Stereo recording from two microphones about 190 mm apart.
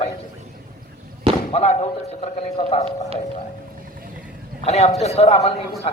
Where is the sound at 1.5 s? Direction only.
35° left (ahead or behind).